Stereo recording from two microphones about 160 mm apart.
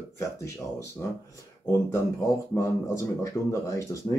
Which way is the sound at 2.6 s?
20° left (ahead or behind).